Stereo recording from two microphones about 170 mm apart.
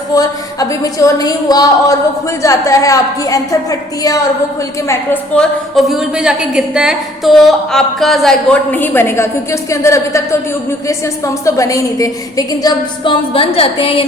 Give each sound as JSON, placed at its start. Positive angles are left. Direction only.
{"t": 0.1, "sound": "a woman's voice", "side_deg": 20}
{"t": 5.7, "sound": "a woman's voice", "side_deg": -5}